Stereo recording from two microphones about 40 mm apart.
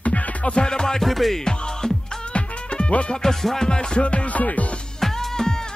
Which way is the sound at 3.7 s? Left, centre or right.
Left.